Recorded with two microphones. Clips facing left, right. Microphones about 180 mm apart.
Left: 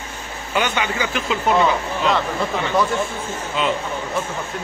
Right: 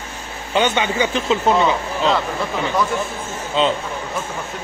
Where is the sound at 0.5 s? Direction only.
25° right (ahead or behind).